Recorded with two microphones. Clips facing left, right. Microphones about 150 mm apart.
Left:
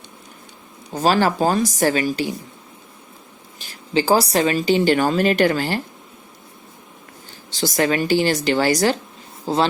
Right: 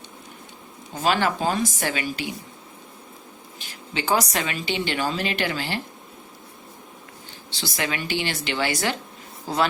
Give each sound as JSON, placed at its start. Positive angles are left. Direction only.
{"t": 0.9, "sound": "speech", "side_deg": 40}
{"t": 3.6, "sound": "speech", "side_deg": 35}
{"t": 7.5, "sound": "speech", "side_deg": 45}
{"t": 9.5, "sound": "speech", "side_deg": 30}